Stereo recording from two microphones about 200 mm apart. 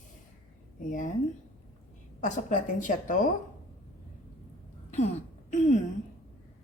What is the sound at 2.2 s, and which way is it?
Speech, 40° left (ahead or behind).